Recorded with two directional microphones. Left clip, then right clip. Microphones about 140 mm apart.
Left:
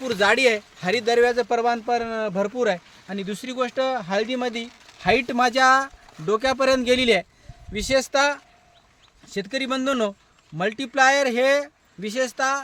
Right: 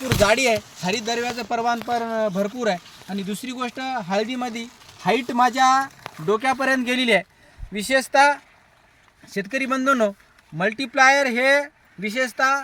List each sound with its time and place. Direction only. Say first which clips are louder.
0.2 s speech: even; 20° left (ahead or behind)
7.8 s speech: right 3 dB; 15° left (ahead or behind)